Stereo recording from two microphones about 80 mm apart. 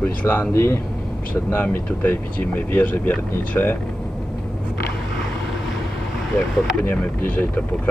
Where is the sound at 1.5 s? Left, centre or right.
Left.